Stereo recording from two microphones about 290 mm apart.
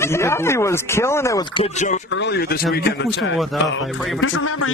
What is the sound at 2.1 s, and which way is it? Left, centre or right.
A man's voice, left.